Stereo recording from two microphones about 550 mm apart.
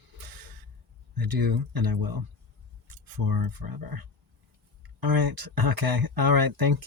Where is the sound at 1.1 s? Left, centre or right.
Right.